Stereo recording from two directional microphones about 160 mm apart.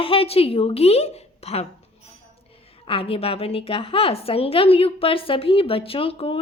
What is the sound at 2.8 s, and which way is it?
A woman's voice, 35° left (ahead or behind).